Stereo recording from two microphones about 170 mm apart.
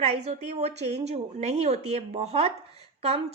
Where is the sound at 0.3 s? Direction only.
40° right (ahead or behind).